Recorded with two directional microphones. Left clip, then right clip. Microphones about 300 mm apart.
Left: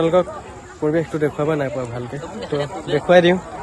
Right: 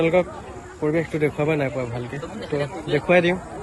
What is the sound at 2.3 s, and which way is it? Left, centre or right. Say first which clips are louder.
Speech: left 3 dB; left.